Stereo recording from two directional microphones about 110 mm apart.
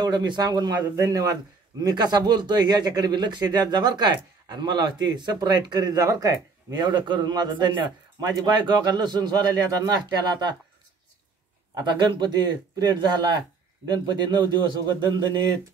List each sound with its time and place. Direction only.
0.0 s a man's voice: 40° right (ahead or behind)
11.7 s a man's voice: 45° right (ahead or behind)